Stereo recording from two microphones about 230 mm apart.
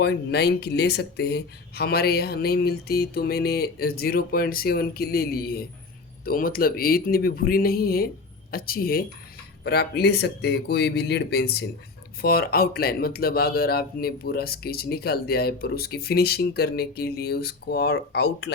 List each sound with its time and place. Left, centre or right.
0.0 s speech: left